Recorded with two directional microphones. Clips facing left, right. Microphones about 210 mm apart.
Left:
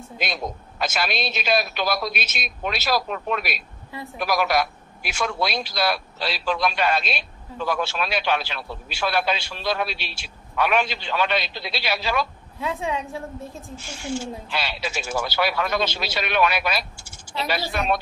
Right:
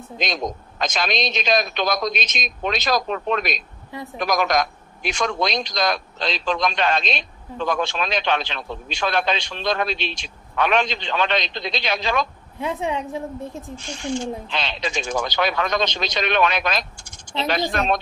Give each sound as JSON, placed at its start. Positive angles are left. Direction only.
{"t": 0.2, "sound": "a man's voice", "side_deg": 5}
{"t": 12.5, "sound": "a woman's voice", "side_deg": -20}
{"t": 13.7, "sound": "a man's voice", "side_deg": 5}